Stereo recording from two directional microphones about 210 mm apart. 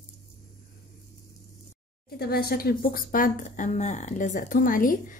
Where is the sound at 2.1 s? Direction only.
45° left (ahead or behind).